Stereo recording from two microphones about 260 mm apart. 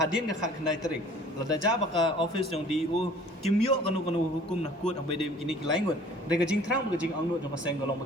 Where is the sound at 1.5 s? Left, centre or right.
Centre.